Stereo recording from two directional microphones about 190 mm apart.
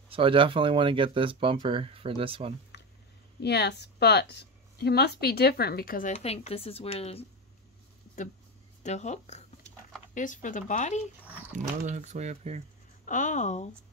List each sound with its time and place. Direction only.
0.1 s speech: 30° right (ahead or behind)
3.3 s speech: 60° left (ahead or behind); by 7.2 s 30° left (ahead or behind)
8.8 s speech: 35° left (ahead or behind)
11.5 s speech: 40° right (ahead or behind)
13.0 s speech: 40° left (ahead or behind)